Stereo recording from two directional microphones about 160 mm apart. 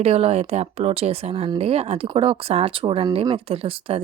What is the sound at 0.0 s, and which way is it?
Speech, 40° right (ahead or behind).